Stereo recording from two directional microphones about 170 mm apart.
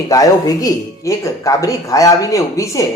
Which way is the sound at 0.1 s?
20° left (ahead or behind).